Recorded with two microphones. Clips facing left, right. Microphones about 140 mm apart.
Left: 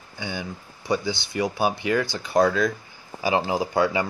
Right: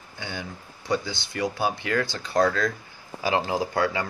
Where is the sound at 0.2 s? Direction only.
10° left (ahead or behind).